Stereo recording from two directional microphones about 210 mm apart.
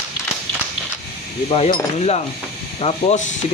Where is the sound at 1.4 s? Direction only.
25° left (ahead or behind).